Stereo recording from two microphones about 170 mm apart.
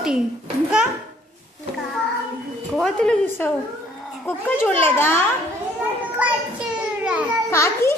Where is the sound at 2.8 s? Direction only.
5° left (ahead or behind).